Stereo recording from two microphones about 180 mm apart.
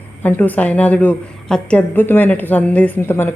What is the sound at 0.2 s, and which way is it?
A woman's voice, 10° left (ahead or behind).